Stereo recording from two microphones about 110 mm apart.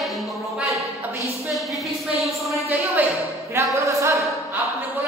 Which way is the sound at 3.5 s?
25° right (ahead or behind).